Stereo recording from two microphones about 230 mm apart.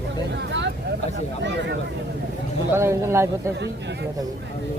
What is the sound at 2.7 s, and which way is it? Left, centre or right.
Speech, centre.